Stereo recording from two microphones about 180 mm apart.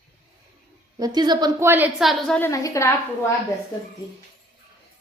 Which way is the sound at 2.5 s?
15° left (ahead or behind).